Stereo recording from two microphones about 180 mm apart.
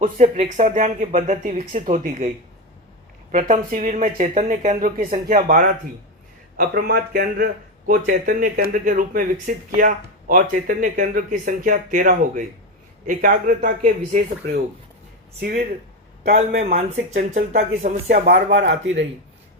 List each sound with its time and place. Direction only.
0.0 s a man's voice: 45° right (ahead or behind)
3.3 s a man's voice: 45° right (ahead or behind)
6.6 s a man's voice: 60° right (ahead or behind)
15.4 s a man's voice: 60° right (ahead or behind)
17.0 s speech: 40° right (ahead or behind)
18.5 s speech: 90° right